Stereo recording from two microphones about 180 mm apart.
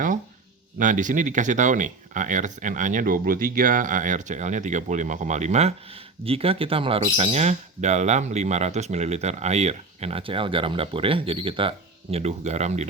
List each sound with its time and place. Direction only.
0.8 s speech: 45° right (ahead or behind)